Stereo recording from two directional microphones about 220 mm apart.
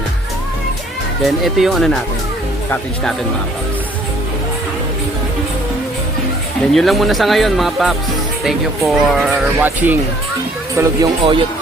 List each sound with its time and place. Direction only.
1.2 s speech: centre (ahead or behind)
6.7 s speech: centre (ahead or behind); by 11.3 s 15° right (ahead or behind)